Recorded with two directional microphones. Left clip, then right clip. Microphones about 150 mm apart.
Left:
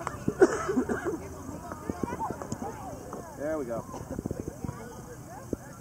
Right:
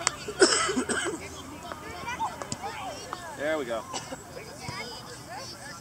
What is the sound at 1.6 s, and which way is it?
Clip-clop, 30° right (ahead or behind).